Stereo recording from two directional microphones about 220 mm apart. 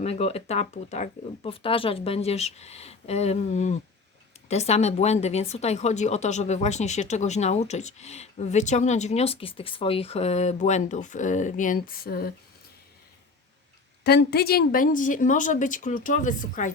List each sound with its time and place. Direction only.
0.0 s speech: 30° left (ahead or behind)
14.0 s speech: 45° left (ahead or behind)